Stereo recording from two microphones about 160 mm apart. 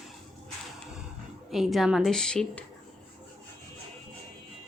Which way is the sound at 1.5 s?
Centre (ahead or behind).